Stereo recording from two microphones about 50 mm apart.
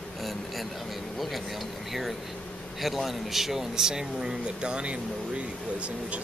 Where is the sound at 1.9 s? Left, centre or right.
Centre.